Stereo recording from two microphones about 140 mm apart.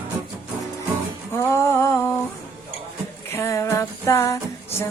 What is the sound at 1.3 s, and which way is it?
Music, 20° left (ahead or behind).